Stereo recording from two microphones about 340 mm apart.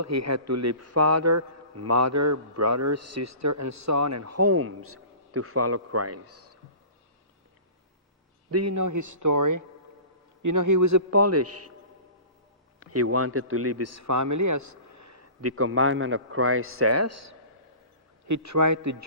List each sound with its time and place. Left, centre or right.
0.0 s a man's voice: right
8.4 s a man's voice: right
12.8 s a man's voice: right